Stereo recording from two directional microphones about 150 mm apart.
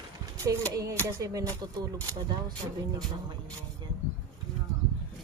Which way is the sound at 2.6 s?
40° right (ahead or behind).